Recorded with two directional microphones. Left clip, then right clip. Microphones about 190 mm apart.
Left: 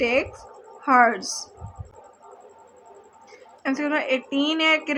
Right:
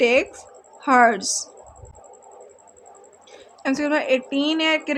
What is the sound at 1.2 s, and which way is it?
Speech, 90° right.